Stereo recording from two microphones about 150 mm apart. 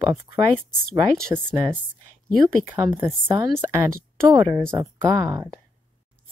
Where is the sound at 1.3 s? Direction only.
15° right (ahead or behind).